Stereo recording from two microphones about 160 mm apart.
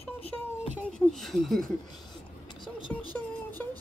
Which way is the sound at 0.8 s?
Centre (ahead or behind).